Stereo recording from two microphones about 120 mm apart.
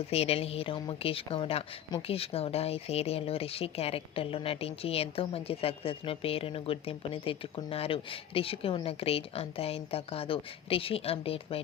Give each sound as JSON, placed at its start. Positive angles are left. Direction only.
{"t": 0.1, "sound": "speech", "side_deg": 60}